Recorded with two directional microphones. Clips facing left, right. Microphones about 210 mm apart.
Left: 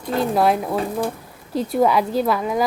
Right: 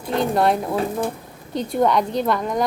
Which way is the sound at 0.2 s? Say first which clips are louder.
Left 1 dB; centre (ahead or behind).